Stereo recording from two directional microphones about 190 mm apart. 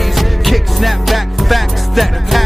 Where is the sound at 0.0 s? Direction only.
Centre (ahead or behind).